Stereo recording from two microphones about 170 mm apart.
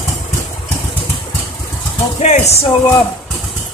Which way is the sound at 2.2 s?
40° left (ahead or behind).